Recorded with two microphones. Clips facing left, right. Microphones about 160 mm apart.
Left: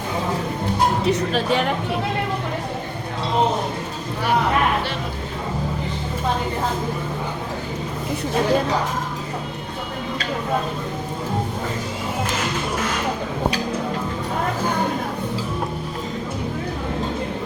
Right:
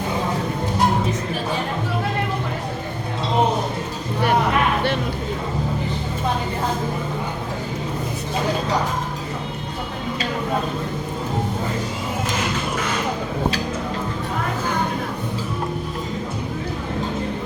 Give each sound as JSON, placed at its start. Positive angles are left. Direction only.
{"t": 1.0, "sound": "speech", "side_deg": 75}